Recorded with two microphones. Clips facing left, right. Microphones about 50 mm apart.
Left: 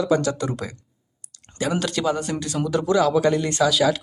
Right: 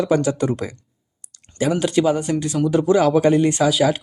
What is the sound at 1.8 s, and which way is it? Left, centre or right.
Speech, right.